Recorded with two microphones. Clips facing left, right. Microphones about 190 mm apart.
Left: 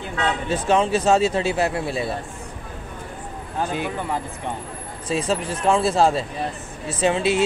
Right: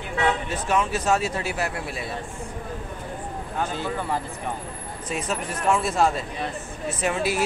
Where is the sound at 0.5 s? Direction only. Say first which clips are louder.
Left 5 dB; 30° left (ahead or behind).